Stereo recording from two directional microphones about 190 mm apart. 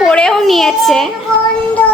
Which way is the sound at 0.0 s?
5° left (ahead or behind).